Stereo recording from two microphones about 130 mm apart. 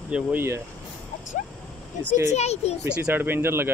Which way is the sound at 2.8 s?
10° right (ahead or behind).